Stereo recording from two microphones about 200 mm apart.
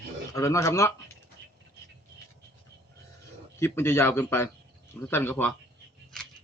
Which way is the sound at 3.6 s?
10° left (ahead or behind).